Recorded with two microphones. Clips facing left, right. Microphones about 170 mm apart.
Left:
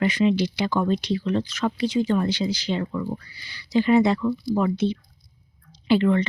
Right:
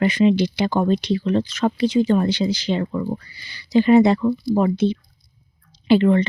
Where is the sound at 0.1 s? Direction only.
25° right (ahead or behind).